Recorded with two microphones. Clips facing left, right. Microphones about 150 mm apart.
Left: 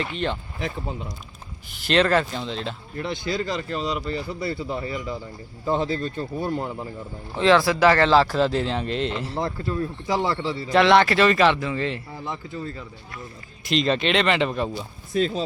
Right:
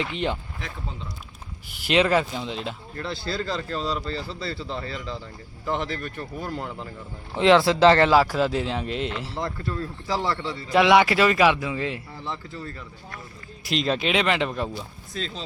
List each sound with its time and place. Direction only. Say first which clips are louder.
1.7 s speech: left 1 dB; 10° right (ahead or behind)
3.2 s speech: left 1 dB; 15° left (ahead or behind)
7.3 s speech: right 1 dB; 20° right (ahead or behind); by 9.4 s centre (ahead or behind)
9.4 s speech: left 4 dB; 25° left (ahead or behind)
10.7 s speech: even; 10° right (ahead or behind)
12.2 s speech: left 3 dB; 15° left (ahead or behind)
13.7 s speech: left 3 dB; 5° right (ahead or behind)